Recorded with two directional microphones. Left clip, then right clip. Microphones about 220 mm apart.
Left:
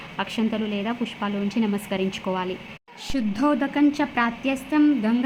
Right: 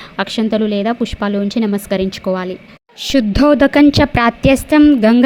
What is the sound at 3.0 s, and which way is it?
A woman's voice, 40° right (ahead or behind).